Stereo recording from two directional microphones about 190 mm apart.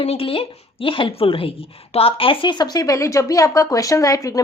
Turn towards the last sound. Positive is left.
turn(degrees=15)  # may be behind; listen again after turning